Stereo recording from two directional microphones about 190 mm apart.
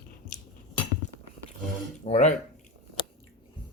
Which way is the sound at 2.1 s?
40° left (ahead or behind).